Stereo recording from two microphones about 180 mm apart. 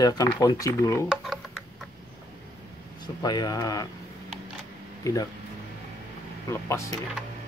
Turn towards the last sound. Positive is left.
turn(degrees=15)  # may be behind; listen again after turning